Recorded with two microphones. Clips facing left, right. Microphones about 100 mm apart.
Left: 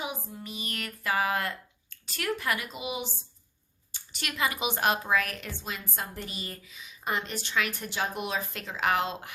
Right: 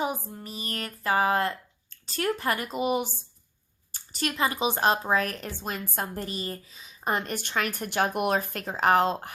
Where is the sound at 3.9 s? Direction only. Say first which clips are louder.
Right 7 dB; 40° right (ahead or behind).